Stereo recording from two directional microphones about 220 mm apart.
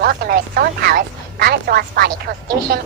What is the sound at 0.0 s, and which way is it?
A woman's voice, 45° right (ahead or behind).